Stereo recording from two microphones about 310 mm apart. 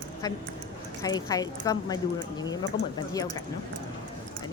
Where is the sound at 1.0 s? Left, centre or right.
Centre.